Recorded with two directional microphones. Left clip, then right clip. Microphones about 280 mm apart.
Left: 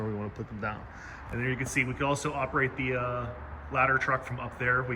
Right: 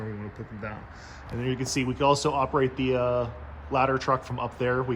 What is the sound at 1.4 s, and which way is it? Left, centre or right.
Speech, centre.